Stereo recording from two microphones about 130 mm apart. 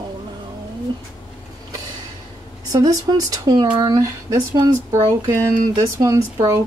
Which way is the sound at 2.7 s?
30° right (ahead or behind).